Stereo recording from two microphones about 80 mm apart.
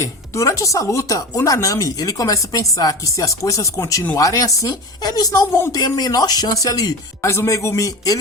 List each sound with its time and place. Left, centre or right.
0.0 s speech: left
5.5 s a man's voice: left
5.7 s speech: left
7.3 s a man's voice: left